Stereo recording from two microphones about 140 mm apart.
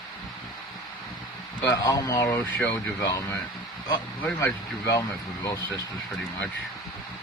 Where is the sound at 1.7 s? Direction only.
25° left (ahead or behind).